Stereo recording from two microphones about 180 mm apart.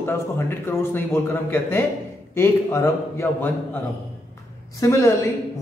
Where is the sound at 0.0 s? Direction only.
15° left (ahead or behind).